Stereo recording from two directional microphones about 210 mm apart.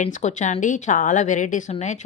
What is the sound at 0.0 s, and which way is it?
A woman's voice, 35° left (ahead or behind).